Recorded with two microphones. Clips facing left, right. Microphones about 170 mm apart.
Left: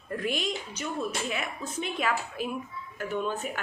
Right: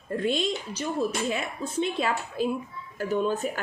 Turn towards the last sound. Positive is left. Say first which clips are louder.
# right 5 dB
turn(degrees=-40)  # may be behind; listen again after turning